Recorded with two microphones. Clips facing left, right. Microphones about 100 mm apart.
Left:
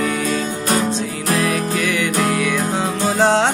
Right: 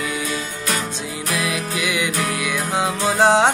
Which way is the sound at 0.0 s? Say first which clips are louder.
Left 6 dB; 40° left (ahead or behind).